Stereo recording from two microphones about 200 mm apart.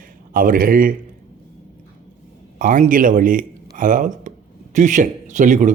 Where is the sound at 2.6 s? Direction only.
40° right (ahead or behind).